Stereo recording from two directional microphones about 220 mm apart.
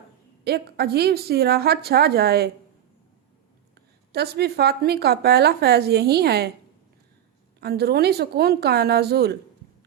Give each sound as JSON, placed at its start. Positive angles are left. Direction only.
{"t": 0.4, "sound": "speech", "side_deg": -45}
{"t": 4.1, "sound": "speech", "side_deg": -45}
{"t": 7.6, "sound": "speech", "side_deg": -45}